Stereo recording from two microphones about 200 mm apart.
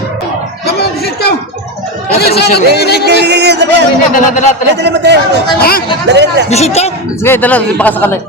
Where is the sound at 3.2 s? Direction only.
55° right (ahead or behind).